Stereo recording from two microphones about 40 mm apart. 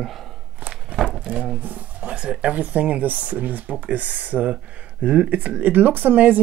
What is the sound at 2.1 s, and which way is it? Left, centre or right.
Speech, right.